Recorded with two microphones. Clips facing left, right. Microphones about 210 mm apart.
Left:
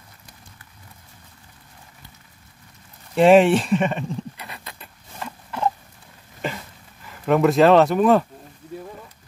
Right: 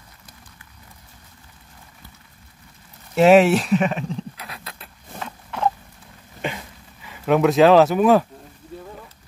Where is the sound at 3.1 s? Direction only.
5° right (ahead or behind).